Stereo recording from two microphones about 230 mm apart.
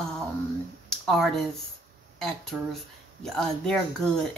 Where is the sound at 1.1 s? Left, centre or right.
Centre.